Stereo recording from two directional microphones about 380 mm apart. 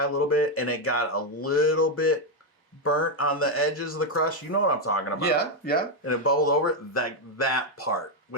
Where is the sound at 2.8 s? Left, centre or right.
Left.